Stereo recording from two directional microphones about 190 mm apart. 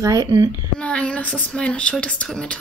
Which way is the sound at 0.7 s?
5° left (ahead or behind).